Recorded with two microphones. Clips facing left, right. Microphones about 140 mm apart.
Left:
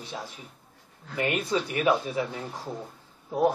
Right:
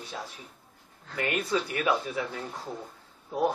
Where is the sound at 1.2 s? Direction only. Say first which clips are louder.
Left 2 dB; 5° left (ahead or behind).